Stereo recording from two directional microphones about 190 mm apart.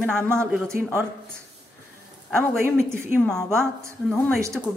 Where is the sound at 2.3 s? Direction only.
15° right (ahead or behind).